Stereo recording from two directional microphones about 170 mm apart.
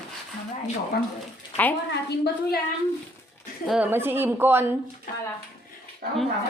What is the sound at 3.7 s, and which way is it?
A woman's voice, 10° right (ahead or behind).